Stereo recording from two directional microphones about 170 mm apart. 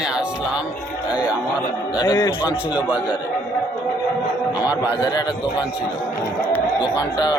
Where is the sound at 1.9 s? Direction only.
25° left (ahead or behind).